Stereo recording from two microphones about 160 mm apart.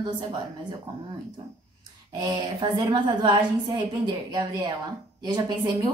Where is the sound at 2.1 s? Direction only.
30° right (ahead or behind).